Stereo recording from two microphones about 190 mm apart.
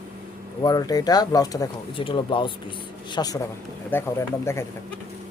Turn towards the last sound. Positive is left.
turn(degrees=15)  # may be behind; listen again after turning